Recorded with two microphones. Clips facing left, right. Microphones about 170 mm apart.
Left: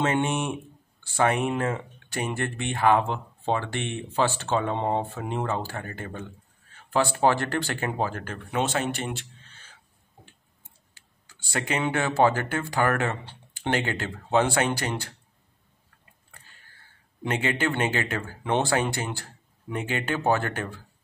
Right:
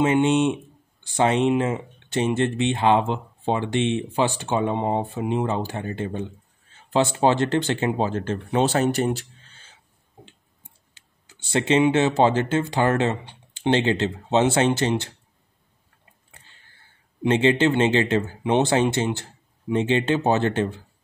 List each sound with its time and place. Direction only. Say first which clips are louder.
0.0 s speech: right 7 dB; 20° right (ahead or behind)
11.0 s speech: right 4 dB; 20° right (ahead or behind)
16.3 s a sound: even; 25° right (ahead or behind)
17.2 s speech: right 8 dB; 25° right (ahead or behind)